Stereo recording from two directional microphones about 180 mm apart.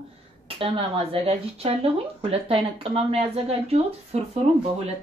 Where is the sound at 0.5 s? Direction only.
30° right (ahead or behind).